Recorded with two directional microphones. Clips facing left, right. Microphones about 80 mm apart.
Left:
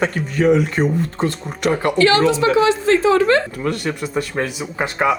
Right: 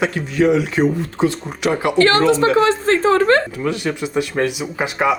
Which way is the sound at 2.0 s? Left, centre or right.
Right.